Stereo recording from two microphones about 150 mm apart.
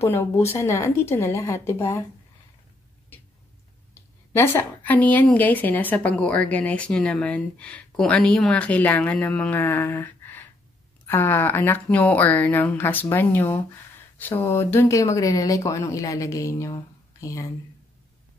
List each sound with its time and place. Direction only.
0.0 s a woman's voice: 15° left (ahead or behind)
3.9 s a woman's voice: 15° left (ahead or behind)